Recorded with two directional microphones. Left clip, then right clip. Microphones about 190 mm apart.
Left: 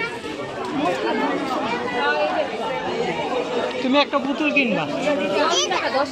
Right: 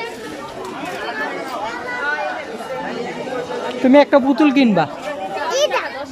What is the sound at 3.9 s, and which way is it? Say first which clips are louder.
Speech: right 9 dB; 55° right (ahead or behind).